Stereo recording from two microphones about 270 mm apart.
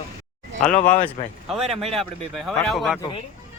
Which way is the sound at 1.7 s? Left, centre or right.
Right.